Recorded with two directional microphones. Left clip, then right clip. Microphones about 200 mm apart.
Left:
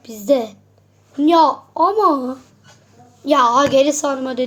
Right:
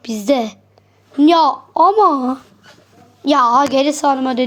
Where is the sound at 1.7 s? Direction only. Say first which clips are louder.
Right 6 dB; 30° right (ahead or behind).